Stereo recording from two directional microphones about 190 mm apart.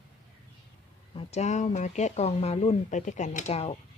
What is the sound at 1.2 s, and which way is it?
Speech, 35° left (ahead or behind).